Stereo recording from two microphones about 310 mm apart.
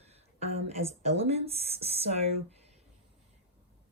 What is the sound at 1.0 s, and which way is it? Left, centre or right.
Speech, centre.